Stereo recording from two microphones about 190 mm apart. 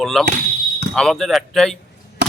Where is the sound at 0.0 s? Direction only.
Centre (ahead or behind).